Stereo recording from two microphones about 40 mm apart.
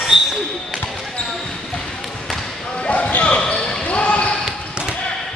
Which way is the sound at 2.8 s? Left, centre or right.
Left.